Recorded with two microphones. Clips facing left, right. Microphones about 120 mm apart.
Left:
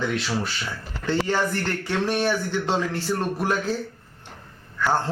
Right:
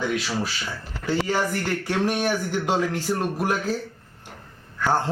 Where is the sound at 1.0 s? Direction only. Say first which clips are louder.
Even; 10° right (ahead or behind).